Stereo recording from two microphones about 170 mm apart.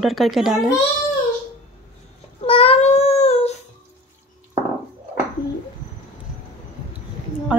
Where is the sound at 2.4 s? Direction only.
35° left (ahead or behind).